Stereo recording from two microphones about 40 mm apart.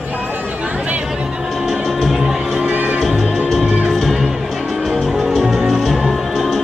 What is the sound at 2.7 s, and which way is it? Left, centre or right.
Music, right.